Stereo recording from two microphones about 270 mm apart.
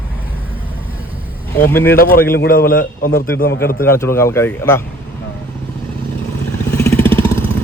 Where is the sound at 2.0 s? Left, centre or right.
Left.